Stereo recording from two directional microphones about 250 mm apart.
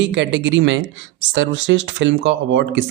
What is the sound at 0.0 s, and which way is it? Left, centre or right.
Speech, right.